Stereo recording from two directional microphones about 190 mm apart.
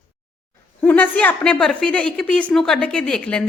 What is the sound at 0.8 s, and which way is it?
A woman's voice, 5° left (ahead or behind).